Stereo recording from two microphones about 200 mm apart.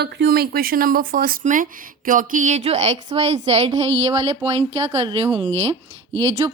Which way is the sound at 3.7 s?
15° right (ahead or behind).